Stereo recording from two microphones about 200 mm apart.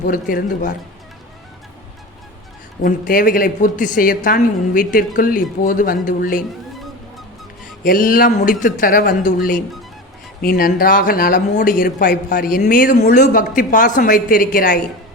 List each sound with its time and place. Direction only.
0.0 s speech: 45° left (ahead or behind)
2.8 s speech: 45° left (ahead or behind)
7.9 s speech: 45° left (ahead or behind)